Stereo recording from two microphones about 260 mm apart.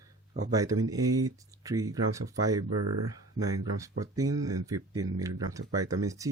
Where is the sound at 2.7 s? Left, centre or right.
Right.